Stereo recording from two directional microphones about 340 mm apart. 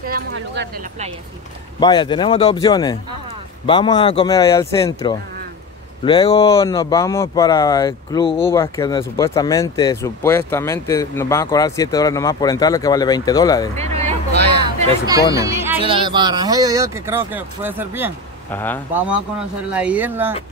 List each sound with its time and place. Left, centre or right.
0.0 s speech: right
1.8 s speech: centre
13.7 s a sound: centre
15.3 s speech: centre
18.5 s speech: centre